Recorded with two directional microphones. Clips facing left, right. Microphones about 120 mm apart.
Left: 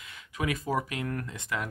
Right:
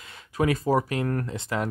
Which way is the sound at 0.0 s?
35° right (ahead or behind).